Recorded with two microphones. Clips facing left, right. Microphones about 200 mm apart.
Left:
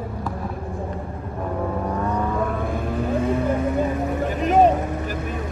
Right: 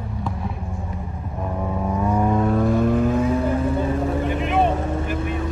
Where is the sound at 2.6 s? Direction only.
45° right (ahead or behind).